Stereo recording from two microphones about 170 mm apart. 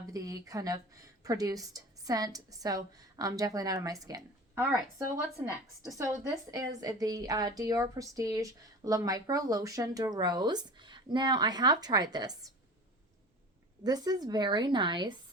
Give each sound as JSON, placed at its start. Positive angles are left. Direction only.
{"t": 0.1, "sound": "speech", "side_deg": -20}
{"t": 6.2, "sound": "speech", "side_deg": -20}
{"t": 13.8, "sound": "speech", "side_deg": -25}